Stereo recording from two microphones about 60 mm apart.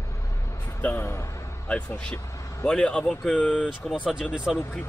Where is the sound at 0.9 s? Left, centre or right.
Left.